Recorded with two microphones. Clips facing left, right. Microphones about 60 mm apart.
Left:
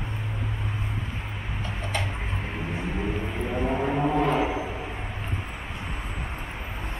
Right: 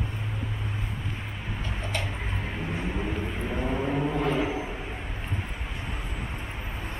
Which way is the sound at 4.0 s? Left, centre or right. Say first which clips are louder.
Left 5 dB; left.